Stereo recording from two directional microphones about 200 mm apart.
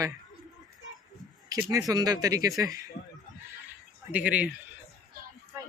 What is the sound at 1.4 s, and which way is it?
Speech, 20° right (ahead or behind).